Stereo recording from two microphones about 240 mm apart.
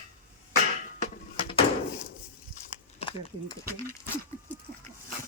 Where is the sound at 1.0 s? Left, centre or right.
Left.